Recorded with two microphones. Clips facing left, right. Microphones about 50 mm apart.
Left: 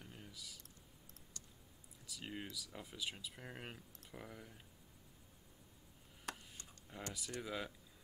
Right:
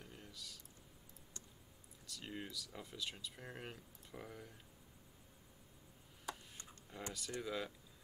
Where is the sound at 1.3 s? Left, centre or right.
Right.